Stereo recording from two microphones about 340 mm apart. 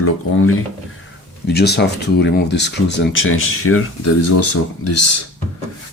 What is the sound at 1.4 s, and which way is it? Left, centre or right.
Speech, left.